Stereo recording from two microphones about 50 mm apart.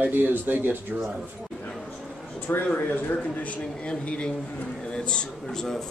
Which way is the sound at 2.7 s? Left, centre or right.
Left.